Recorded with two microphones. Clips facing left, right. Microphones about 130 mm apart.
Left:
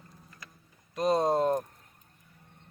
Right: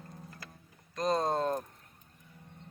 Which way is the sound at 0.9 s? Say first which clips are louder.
Left 4 dB; 10° left (ahead or behind).